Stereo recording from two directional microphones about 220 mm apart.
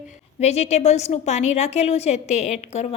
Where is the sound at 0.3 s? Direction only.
30° left (ahead or behind).